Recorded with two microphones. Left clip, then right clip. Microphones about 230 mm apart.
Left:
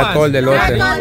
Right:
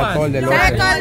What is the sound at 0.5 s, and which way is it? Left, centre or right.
Speech, right.